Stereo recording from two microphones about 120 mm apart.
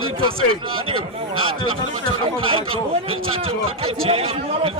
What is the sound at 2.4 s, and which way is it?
A man's voice, 45° right (ahead or behind).